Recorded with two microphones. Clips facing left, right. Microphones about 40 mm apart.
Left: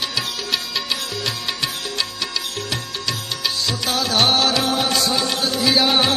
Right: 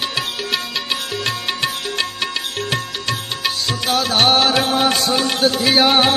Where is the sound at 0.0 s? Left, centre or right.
Right.